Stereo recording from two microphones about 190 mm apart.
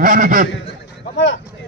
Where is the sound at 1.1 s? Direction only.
70° left (ahead or behind).